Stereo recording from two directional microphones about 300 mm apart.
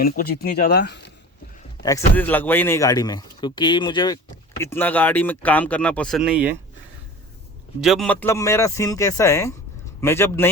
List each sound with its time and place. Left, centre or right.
0.0 s speech: left
1.8 s a man's voice: centre
7.8 s a man's voice: centre